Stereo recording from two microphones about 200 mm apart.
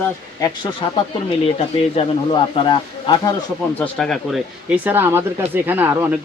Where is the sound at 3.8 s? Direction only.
5° left (ahead or behind).